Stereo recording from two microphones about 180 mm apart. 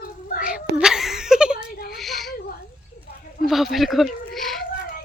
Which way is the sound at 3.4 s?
50° left (ahead or behind).